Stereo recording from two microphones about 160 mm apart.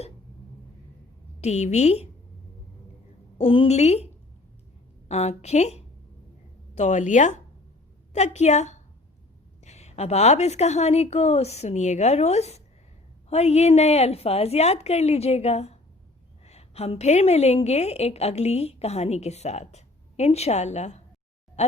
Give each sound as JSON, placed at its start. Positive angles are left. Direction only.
{"t": 1.4, "sound": "a woman's voice", "side_deg": 45}
{"t": 3.3, "sound": "a woman's voice", "side_deg": 35}